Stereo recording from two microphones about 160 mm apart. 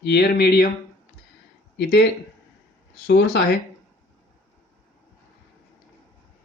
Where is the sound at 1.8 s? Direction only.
90° left.